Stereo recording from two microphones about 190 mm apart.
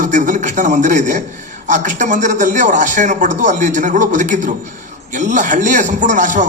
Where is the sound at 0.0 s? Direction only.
40° right (ahead or behind).